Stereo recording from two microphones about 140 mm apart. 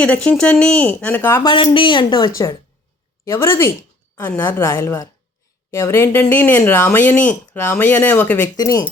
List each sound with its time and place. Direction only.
0.0 s speech: 10° left (ahead or behind)
1.5 s a woman's voice: 35° left (ahead or behind)
2.3 s a woman's voice: 20° left (ahead or behind)
8.5 s a woman's voice: 25° left (ahead or behind)